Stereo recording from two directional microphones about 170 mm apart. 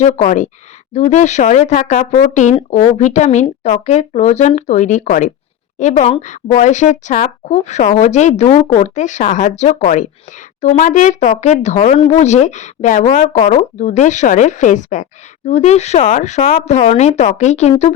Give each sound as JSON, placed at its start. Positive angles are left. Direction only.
{"t": 0.0, "sound": "speech", "side_deg": 45}